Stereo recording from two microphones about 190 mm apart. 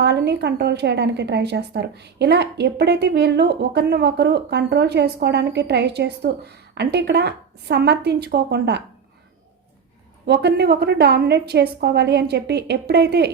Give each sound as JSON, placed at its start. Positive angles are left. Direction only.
{"t": 0.0, "sound": "a woman's voice", "side_deg": -60}
{"t": 10.2, "sound": "a woman's voice", "side_deg": -60}